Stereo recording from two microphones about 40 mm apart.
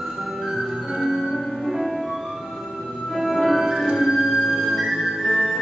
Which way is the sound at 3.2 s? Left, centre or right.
Centre.